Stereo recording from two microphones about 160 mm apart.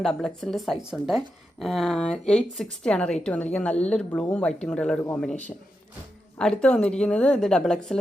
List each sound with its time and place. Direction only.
0.0 s a man's voice: 5° left (ahead or behind)
6.4 s speech: 5° left (ahead or behind)